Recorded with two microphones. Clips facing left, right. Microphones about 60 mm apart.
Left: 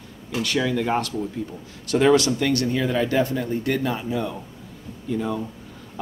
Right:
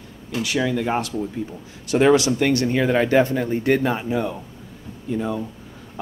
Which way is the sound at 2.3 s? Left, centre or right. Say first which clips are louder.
Right 3 dB; right.